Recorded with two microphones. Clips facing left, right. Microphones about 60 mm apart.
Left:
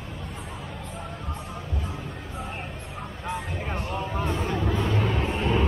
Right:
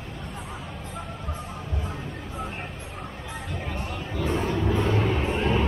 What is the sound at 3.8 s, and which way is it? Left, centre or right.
Music, left.